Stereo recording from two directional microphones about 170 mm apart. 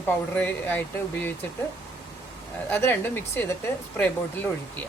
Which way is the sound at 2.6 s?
10° left (ahead or behind).